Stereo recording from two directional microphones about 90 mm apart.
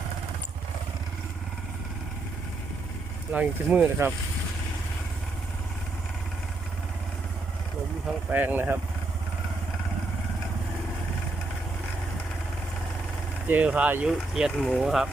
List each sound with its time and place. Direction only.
3.3 s speech: 10° right (ahead or behind)
8.3 s speech: 20° right (ahead or behind)
13.5 s speech: 15° right (ahead or behind)
14.1 s speech: 5° right (ahead or behind)